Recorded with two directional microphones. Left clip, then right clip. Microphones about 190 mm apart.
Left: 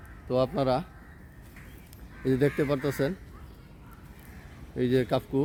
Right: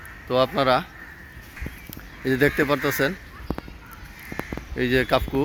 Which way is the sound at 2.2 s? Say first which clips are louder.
Right 6 dB; 5° left (ahead or behind).